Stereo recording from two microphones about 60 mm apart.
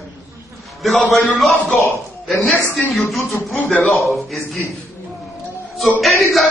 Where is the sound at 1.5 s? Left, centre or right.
Centre.